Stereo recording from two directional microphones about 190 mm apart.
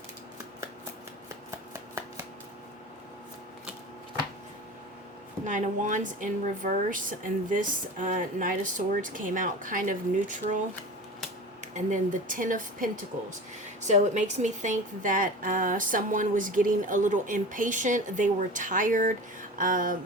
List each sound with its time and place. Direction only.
1.5 s shuffling cards: 15° right (ahead or behind)
5.5 s a woman's voice: 40° right (ahead or behind)
11.7 s a woman's voice: 40° right (ahead or behind)